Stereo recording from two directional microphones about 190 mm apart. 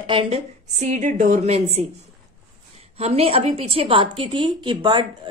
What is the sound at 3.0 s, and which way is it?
A woman's voice, 35° right (ahead or behind).